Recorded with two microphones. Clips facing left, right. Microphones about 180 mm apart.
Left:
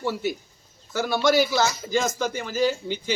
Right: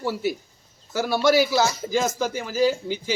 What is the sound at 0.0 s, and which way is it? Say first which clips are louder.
A man's voice: right 1 dB; 5° right (ahead or behind).